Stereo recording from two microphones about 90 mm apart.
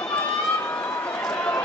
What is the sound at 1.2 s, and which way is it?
Run, 20° left (ahead or behind).